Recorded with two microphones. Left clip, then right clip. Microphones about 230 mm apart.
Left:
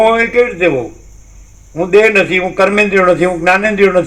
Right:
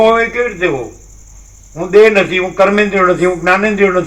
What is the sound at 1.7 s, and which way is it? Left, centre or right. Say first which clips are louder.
A man's voice: right 1 dB; left.